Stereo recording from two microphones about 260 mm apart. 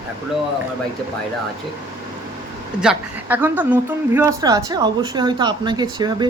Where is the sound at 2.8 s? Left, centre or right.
Centre.